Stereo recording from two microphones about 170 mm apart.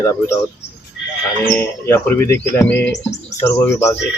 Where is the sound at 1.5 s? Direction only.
10° left (ahead or behind).